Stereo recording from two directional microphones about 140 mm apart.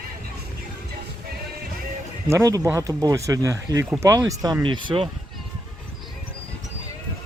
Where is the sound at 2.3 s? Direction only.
20° right (ahead or behind); by 5.1 s 35° right (ahead or behind).